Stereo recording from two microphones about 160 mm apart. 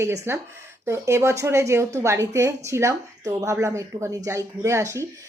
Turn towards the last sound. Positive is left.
turn(degrees=-20)  # may be behind; listen again after turning